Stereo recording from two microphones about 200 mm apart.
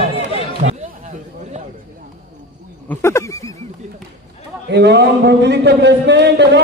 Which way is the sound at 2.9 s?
15° left (ahead or behind).